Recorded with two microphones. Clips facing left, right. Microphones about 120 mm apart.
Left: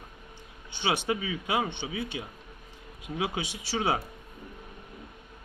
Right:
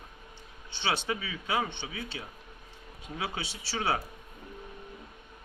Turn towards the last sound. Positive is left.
turn(degrees=15)  # may be behind; listen again after turning